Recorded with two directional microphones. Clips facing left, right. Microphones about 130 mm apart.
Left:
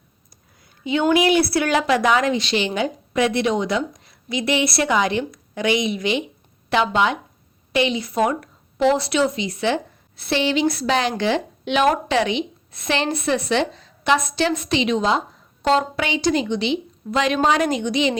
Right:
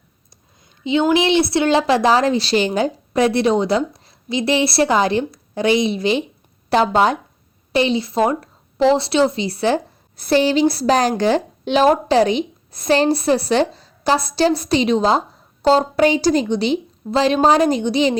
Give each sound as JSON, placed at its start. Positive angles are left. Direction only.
{"t": 1.1, "sound": "a woman's voice", "side_deg": -25}